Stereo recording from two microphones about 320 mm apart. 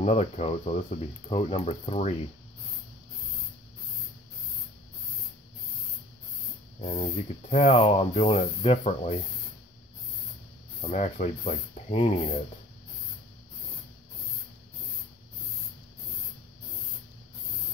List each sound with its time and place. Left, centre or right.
0.0 s speech: centre
6.8 s speech: centre
10.8 s speech: left